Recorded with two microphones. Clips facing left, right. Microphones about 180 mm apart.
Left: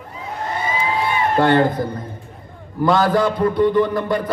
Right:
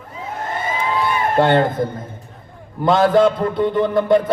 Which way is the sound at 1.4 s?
25° right (ahead or behind).